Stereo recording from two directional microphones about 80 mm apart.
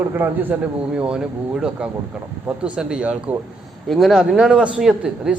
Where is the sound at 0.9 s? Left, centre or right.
Centre.